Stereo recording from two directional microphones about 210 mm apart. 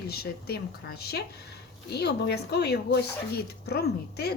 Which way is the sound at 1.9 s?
50° left (ahead or behind).